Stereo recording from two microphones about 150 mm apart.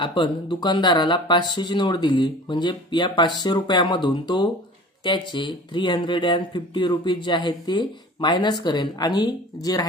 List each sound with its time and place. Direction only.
0.0 s speech: 30° left (ahead or behind)